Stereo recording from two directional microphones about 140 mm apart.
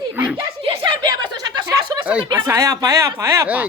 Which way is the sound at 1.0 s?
30° right (ahead or behind).